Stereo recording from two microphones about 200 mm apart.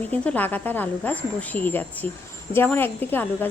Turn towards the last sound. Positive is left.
turn(degrees=10)  # may be behind; listen again after turning